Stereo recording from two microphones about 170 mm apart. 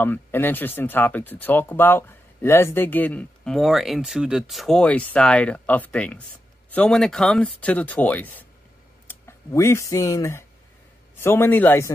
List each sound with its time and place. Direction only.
0.0 s a man's voice: 10° left (ahead or behind)
9.5 s speech: 15° left (ahead or behind)